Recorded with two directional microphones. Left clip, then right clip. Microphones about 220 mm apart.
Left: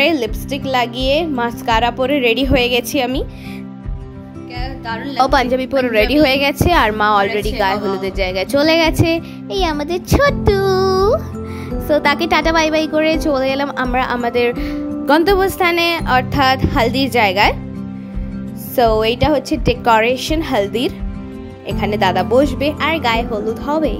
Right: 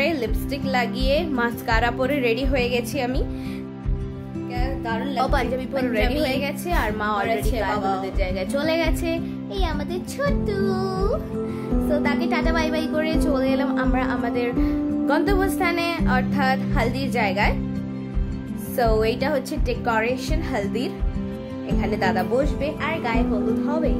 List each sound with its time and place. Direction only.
0.0 s a woman's voice: 30° left (ahead or behind)
5.1 s a woman's voice: 35° left (ahead or behind)
18.8 s a woman's voice: 30° left (ahead or behind)